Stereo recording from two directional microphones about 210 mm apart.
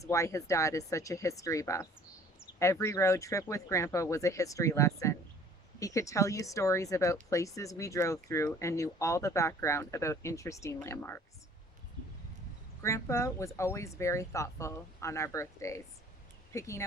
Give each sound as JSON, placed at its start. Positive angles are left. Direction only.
{"t": 0.0, "sound": "speech", "side_deg": 15}
{"t": 12.8, "sound": "speech", "side_deg": 15}